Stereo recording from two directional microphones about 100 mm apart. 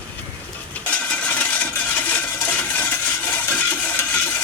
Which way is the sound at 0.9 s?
15° left (ahead or behind).